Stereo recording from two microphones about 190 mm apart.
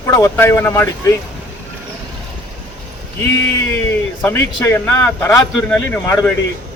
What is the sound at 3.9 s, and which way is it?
A man's voice, 15° left (ahead or behind).